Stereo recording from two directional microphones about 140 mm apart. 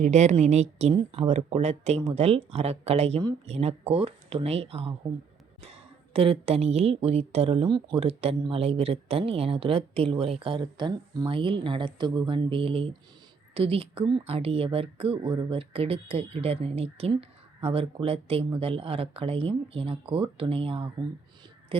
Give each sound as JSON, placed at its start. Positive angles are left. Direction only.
{"t": 0.0, "sound": "a woman's voice", "side_deg": -55}